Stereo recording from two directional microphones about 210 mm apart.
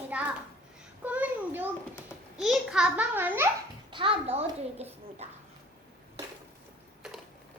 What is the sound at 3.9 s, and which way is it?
Speech, 25° right (ahead or behind).